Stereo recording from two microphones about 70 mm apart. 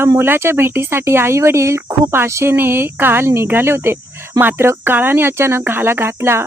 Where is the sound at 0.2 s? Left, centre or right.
Right.